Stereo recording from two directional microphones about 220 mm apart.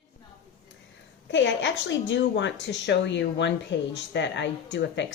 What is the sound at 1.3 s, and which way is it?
A woman's voice, 55° left (ahead or behind).